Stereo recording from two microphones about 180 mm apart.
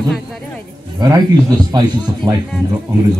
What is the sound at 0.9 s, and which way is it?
A man's voice, 20° right (ahead or behind).